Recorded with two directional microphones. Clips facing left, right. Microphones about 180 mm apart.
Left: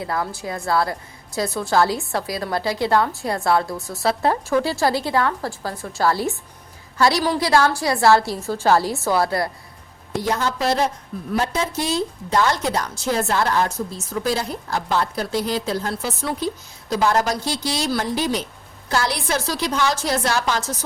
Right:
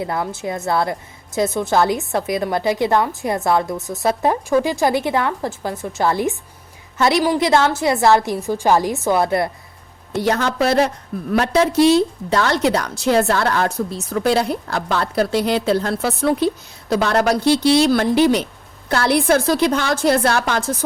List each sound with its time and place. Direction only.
0.0 s a woman's voice: 20° right (ahead or behind)
10.2 s a woman's voice: 70° right (ahead or behind)